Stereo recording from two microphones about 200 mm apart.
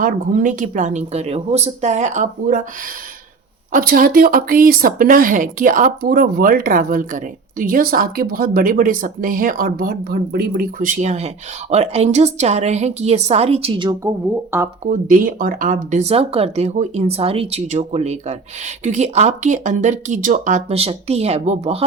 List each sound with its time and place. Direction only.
0.0 s speech: 40° right (ahead or behind)
3.7 s speech: 45° right (ahead or behind); by 14.1 s 25° right (ahead or behind)
14.5 s speech: 10° right (ahead or behind)
14.8 s speech: 40° right (ahead or behind)